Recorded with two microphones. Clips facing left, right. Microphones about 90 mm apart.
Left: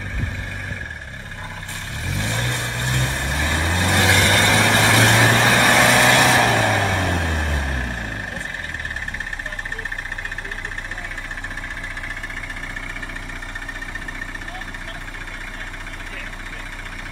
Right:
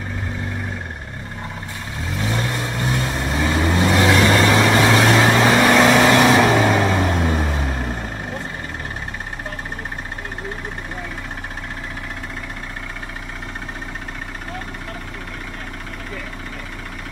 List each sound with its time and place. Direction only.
2.1 s vehicle: 10° right (ahead or behind)